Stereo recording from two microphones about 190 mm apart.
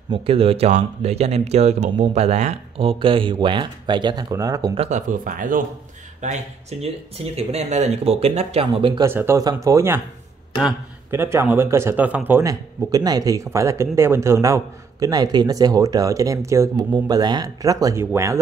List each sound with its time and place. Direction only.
0.1 s speech: 30° right (ahead or behind)
4.7 s speech: 40° right (ahead or behind)
6.2 s speech: 35° right (ahead or behind)
9.0 s speech: 15° right (ahead or behind)